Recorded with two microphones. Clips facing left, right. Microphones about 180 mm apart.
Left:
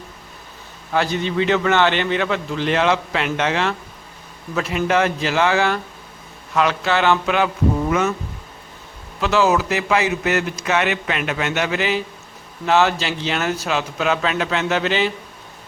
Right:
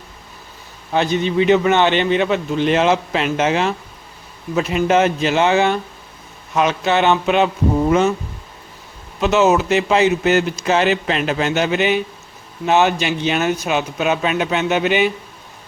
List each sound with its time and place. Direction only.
0.9 s speech: 20° right (ahead or behind)
9.2 s speech: 20° right (ahead or behind)